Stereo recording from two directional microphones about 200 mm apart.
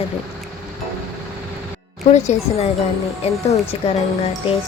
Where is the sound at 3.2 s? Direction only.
30° left (ahead or behind).